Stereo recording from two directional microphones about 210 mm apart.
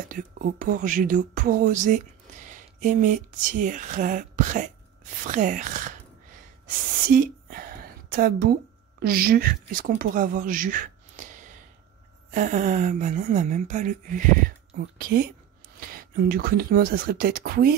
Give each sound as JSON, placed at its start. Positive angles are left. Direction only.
{"t": 0.1, "sound": "speech", "side_deg": -40}
{"t": 7.1, "sound": "a sound", "side_deg": -45}
{"t": 9.0, "sound": "speech", "side_deg": -45}